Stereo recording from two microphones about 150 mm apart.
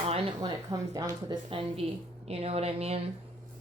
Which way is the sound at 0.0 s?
35° right (ahead or behind).